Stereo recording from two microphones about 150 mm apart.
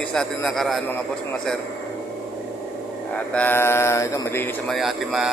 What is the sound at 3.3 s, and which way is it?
A man's voice, 10° left (ahead or behind).